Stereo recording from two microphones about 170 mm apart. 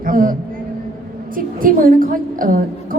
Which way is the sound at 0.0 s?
55° right (ahead or behind).